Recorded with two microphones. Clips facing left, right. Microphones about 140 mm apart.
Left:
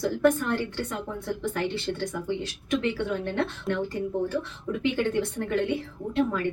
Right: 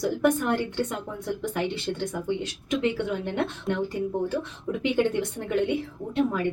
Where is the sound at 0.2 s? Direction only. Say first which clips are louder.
Left 1 dB; 20° right (ahead or behind).